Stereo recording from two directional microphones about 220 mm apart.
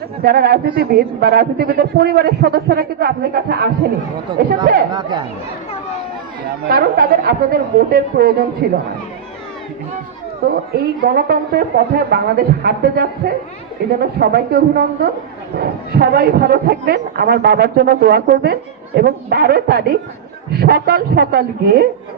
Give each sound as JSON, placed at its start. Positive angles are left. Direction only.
{"t": 0.2, "sound": "speech", "side_deg": -45}
{"t": 4.3, "sound": "speech", "side_deg": -20}
{"t": 6.7, "sound": "a woman's voice", "side_deg": -40}
{"t": 10.4, "sound": "speech", "side_deg": -45}